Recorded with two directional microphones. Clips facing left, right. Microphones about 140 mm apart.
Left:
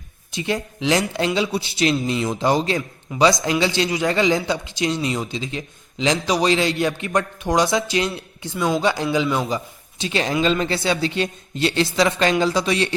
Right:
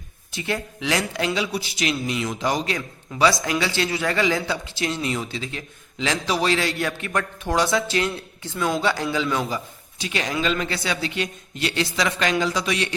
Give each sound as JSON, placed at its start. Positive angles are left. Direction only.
{"t": 0.3, "sound": "a man's voice", "side_deg": 20}
{"t": 10.0, "sound": "a man's voice", "side_deg": 30}